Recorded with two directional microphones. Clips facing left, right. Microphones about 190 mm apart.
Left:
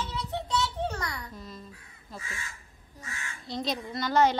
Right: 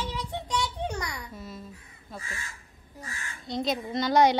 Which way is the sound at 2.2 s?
40° right (ahead or behind).